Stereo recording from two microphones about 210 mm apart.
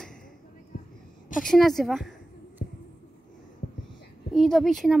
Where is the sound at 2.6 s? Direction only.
35° left (ahead or behind).